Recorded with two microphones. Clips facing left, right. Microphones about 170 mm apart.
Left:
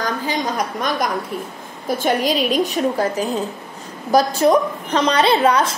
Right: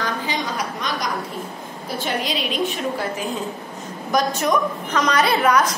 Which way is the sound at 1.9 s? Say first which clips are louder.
Left 7 dB; 45° left (ahead or behind).